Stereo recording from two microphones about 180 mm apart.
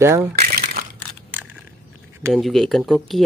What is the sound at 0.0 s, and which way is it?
Speech, 15° right (ahead or behind).